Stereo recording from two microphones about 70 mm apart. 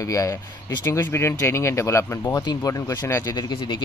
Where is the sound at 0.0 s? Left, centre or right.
Left.